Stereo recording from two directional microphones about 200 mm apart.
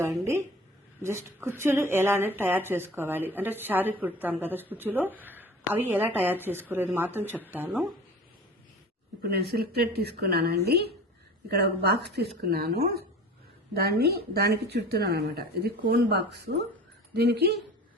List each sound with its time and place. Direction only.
1.0 s a woman's voice: 10° right (ahead or behind)
9.2 s speech: 55° right (ahead or behind)